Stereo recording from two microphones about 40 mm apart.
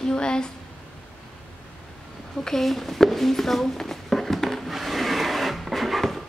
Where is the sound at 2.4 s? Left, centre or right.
Centre.